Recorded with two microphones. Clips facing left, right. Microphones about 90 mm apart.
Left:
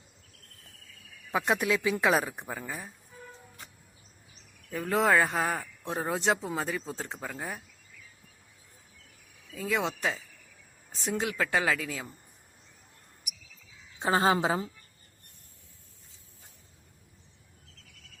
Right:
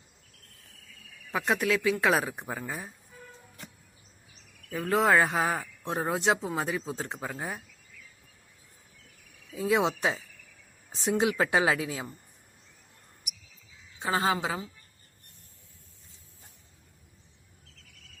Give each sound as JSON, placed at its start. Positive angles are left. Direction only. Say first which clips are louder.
{"t": 1.3, "sound": "speech", "louder": "even", "side_deg": 5}
{"t": 4.7, "sound": "speech", "louder": "right 1 dB", "side_deg": -5}
{"t": 9.6, "sound": "speech", "louder": "right 4 dB", "side_deg": -15}
{"t": 10.9, "sound": "speech", "louder": "right 4 dB", "side_deg": -5}
{"t": 11.2, "sound": "speech", "louder": "right 4 dB", "side_deg": -20}
{"t": 14.0, "sound": "a woman's voice", "louder": "left 3 dB", "side_deg": 35}